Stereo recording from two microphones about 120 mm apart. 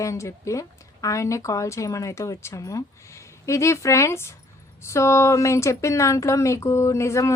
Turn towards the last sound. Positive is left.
turn(degrees=25)  # may be behind; listen again after turning